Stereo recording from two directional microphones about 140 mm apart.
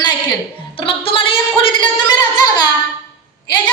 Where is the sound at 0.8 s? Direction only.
40° left (ahead or behind).